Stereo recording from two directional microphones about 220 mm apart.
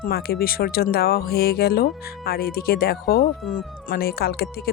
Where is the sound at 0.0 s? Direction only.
45° left (ahead or behind).